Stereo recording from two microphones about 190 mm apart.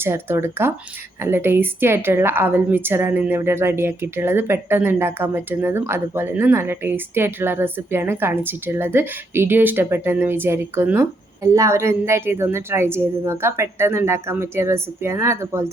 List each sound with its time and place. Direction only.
0.0 s a woman's voice: 15° right (ahead or behind)